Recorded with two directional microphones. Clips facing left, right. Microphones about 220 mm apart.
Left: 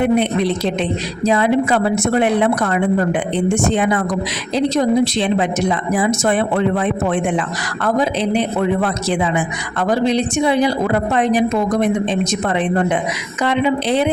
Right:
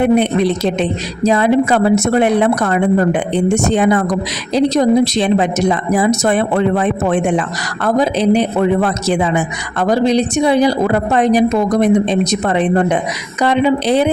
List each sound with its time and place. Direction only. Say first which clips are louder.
0.0 s a woman's voice: right 3 dB; 45° right (ahead or behind)